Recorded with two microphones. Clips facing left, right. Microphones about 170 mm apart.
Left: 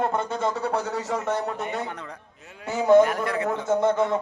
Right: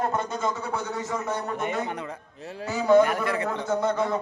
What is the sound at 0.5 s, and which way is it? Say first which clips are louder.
Speech: left 4 dB; 75° left (ahead or behind).